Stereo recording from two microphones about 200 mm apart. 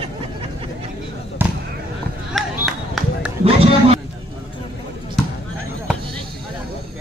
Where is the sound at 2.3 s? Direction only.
Centre (ahead or behind).